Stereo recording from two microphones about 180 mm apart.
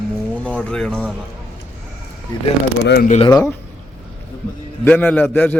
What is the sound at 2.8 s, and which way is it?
Speech, 60° left (ahead or behind).